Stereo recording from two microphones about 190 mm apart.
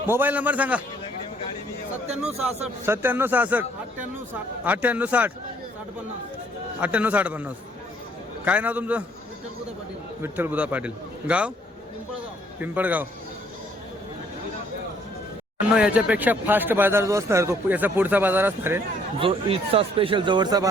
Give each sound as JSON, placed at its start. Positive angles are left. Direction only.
{"t": 0.1, "sound": "speech", "side_deg": -10}
{"t": 2.8, "sound": "speech", "side_deg": -10}
{"t": 6.7, "sound": "speech", "side_deg": -5}
{"t": 10.2, "sound": "speech", "side_deg": -10}
{"t": 12.5, "sound": "speech", "side_deg": -10}
{"t": 15.5, "sound": "speech", "side_deg": -5}
{"t": 19.2, "sound": "speech", "side_deg": -30}